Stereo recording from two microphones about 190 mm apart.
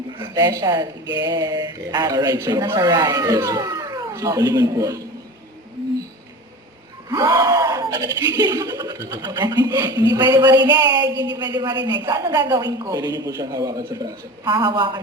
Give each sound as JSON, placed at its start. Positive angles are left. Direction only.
{"t": 0.2, "sound": "speech", "side_deg": -20}
{"t": 7.1, "sound": "speech", "side_deg": -20}